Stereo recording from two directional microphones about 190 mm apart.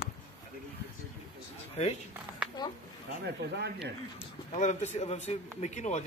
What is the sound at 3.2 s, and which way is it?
Speech, 65° right (ahead or behind).